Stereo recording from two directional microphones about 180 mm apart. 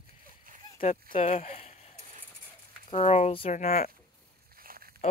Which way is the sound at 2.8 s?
35° left (ahead or behind).